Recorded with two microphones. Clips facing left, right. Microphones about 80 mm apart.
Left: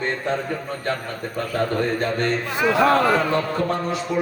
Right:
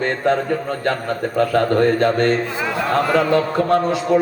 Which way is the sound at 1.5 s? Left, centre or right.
Right.